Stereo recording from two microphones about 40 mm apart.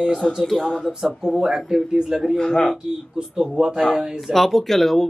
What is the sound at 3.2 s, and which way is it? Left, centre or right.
Speech, centre.